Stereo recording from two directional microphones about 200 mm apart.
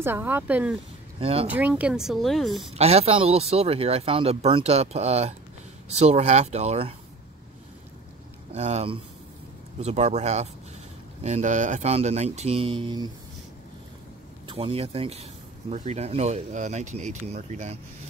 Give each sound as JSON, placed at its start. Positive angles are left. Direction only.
{"t": 0.0, "sound": "speech", "side_deg": -10}
{"t": 1.2, "sound": "speech", "side_deg": -30}
{"t": 1.5, "sound": "speech", "side_deg": -5}
{"t": 2.7, "sound": "speech", "side_deg": -30}
{"t": 8.5, "sound": "speech", "side_deg": -30}
{"t": 14.5, "sound": "speech", "side_deg": -25}